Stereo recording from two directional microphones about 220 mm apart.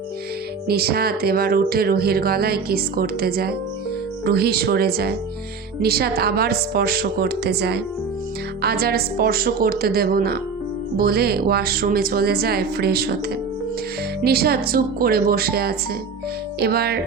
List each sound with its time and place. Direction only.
0.7 s speech: 45° right (ahead or behind)
14.2 s speech: 45° right (ahead or behind)